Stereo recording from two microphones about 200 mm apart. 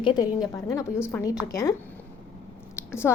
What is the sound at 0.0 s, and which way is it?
A woman's voice, 20° left (ahead or behind).